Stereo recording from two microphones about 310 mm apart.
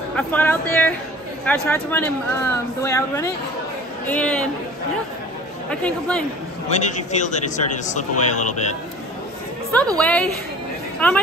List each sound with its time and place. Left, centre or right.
0.1 s speech: centre
5.7 s speech: centre
6.7 s a man's voice: left
9.9 s speech: centre